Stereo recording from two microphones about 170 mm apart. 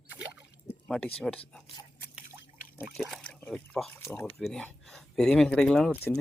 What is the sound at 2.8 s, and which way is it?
Speech, centre (ahead or behind).